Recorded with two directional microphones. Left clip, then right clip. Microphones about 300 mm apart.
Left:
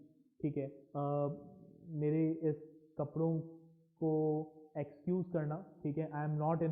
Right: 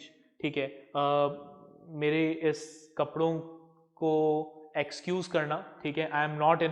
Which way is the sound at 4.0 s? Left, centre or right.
Right.